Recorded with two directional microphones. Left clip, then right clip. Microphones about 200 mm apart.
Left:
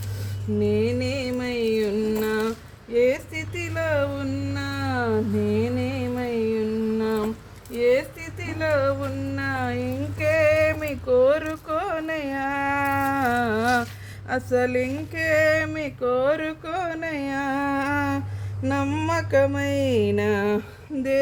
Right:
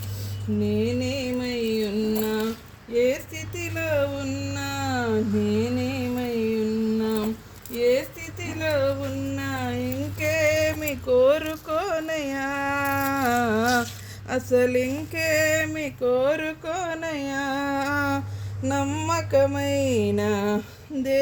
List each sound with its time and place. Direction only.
0.6 s music: 5° right (ahead or behind)
2.9 s a sound: 15° right (ahead or behind)
3.5 s music: 20° right (ahead or behind)
7.0 s humming: 10° right (ahead or behind)
7.8 s a sound: 20° right (ahead or behind); by 13.8 s 35° right (ahead or behind)
14.3 s speech: 40° right (ahead or behind); by 18.2 s 15° left (ahead or behind)
18.6 s music: 10° left (ahead or behind)